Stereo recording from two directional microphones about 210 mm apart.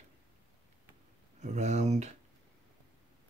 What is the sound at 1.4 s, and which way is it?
Speech, 35° right (ahead or behind).